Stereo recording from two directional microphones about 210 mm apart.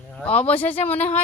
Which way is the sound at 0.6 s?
25° left (ahead or behind).